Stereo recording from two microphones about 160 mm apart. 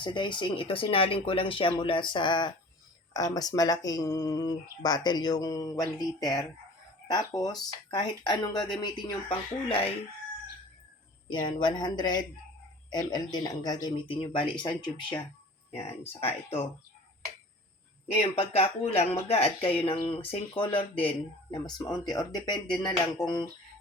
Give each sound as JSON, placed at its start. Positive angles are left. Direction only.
{"t": 0.0, "sound": "speech", "side_deg": 30}
{"t": 11.3, "sound": "speech", "side_deg": 30}
{"t": 15.7, "sound": "speech", "side_deg": 40}
{"t": 18.2, "sound": "speech", "side_deg": 40}